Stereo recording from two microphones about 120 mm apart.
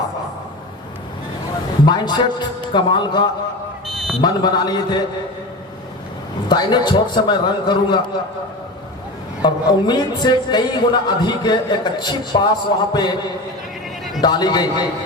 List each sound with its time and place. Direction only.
1.8 s a man's voice: 35° left (ahead or behind)
3.8 s buzzer: centre (ahead or behind)
4.2 s a man's voice: 35° left (ahead or behind)
6.5 s a man's voice: 35° left (ahead or behind)
9.4 s a man's voice: 35° left (ahead or behind)
14.2 s a man's voice: 35° left (ahead or behind)